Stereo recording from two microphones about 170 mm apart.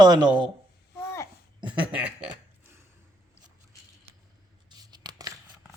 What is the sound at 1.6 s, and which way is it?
Speech, 30° right (ahead or behind).